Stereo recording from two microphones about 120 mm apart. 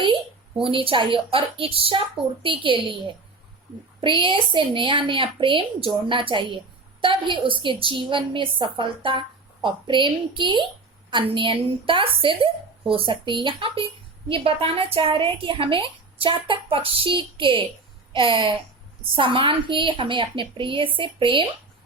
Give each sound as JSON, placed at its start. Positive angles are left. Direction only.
{"t": 0.6, "sound": "a woman's voice", "side_deg": -45}